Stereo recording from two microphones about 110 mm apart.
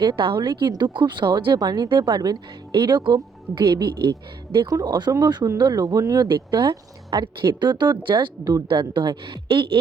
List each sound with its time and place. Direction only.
0.0 s speech: 45° right (ahead or behind)